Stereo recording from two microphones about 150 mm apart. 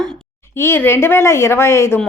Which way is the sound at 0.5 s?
15° left (ahead or behind).